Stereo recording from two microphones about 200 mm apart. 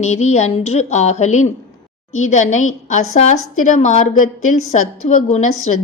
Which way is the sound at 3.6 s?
35° left (ahead or behind).